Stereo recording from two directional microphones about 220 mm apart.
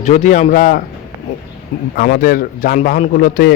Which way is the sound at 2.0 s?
40° left (ahead or behind).